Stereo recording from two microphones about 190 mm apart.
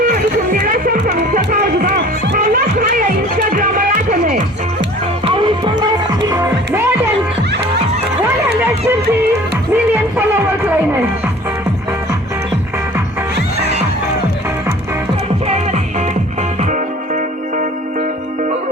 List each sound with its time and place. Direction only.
0.5 s music: 45° right (ahead or behind)
2.5 s music: 45° right (ahead or behind)
5.2 s music: 25° right (ahead or behind)
9.7 s music: 10° right (ahead or behind)
15.4 s music: 35° right (ahead or behind)